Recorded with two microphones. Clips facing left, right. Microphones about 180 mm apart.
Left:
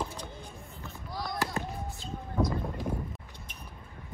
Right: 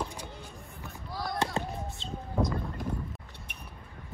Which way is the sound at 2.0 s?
25° right (ahead or behind).